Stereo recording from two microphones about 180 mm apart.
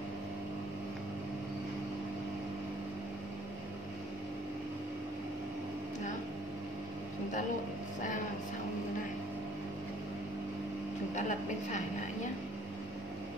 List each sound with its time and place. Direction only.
11.1 s a woman's voice: 40° left (ahead or behind)